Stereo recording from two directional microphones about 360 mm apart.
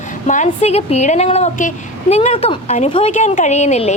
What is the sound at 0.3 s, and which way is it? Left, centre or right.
A woman's voice, centre.